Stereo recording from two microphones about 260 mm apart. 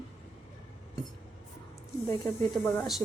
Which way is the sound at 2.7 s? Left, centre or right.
Centre.